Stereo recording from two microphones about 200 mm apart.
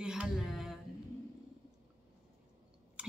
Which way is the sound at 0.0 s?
5° right (ahead or behind).